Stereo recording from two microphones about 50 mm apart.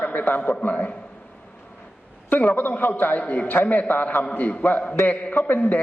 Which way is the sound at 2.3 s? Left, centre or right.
Left.